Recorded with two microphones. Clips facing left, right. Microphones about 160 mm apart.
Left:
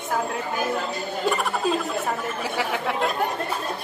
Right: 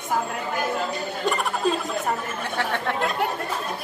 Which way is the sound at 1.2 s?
10° left (ahead or behind).